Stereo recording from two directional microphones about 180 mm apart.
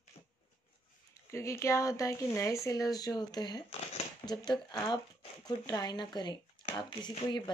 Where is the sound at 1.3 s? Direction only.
15° left (ahead or behind).